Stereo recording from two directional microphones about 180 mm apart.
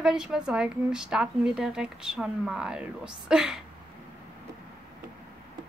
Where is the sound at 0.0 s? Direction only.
5° right (ahead or behind).